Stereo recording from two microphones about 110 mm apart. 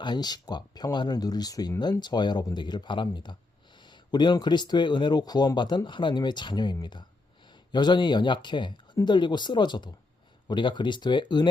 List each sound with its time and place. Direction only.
0.0 s speech: 40° left (ahead or behind)